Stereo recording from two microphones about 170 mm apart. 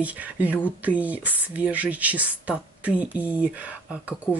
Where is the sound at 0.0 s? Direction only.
10° right (ahead or behind).